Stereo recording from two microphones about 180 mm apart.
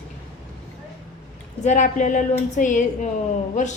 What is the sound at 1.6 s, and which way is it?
A woman's voice, 40° left (ahead or behind).